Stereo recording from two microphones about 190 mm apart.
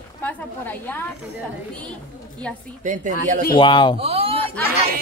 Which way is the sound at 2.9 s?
40° right (ahead or behind).